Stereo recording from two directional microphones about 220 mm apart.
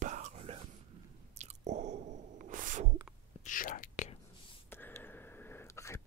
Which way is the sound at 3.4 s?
35° left (ahead or behind).